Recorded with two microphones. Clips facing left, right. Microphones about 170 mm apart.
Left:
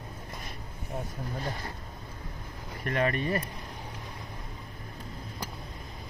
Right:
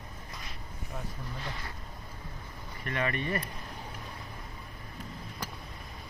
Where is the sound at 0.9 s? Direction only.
40° left (ahead or behind).